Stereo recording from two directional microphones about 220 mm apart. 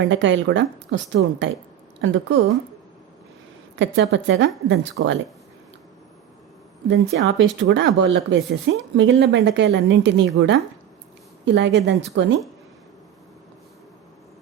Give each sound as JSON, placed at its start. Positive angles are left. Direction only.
{"t": 0.1, "sound": "speech", "side_deg": -55}
{"t": 3.8, "sound": "speech", "side_deg": -55}
{"t": 6.8, "sound": "a woman's voice", "side_deg": -55}